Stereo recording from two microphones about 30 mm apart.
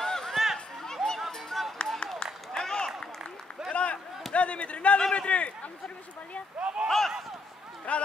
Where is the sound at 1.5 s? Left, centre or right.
Centre.